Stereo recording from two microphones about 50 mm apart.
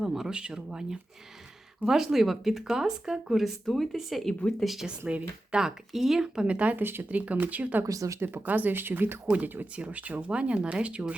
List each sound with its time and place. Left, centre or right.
0.0 s speech: centre
4.9 s speech: right
8.2 s speech: right
8.4 s speech: right